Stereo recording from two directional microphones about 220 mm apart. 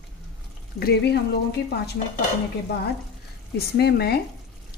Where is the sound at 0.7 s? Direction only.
45° left (ahead or behind).